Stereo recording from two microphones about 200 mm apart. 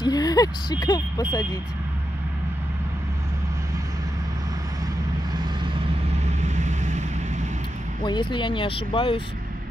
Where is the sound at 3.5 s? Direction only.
15° right (ahead or behind); by 7.9 s 35° right (ahead or behind).